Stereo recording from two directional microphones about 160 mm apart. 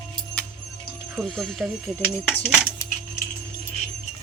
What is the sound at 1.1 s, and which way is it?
Speech, 5° left (ahead or behind).